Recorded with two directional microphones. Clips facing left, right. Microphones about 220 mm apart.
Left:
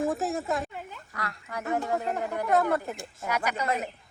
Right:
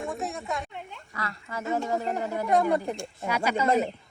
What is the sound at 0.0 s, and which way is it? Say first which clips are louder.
Speech: left 5 dB; centre (ahead or behind).